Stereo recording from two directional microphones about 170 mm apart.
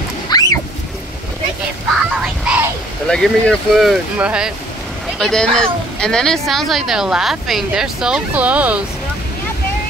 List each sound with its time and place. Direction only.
0.3 s a sound: 20° left (ahead or behind)
2.5 s vehicle: 5° right (ahead or behind)
3.1 s speech: 5° left (ahead or behind)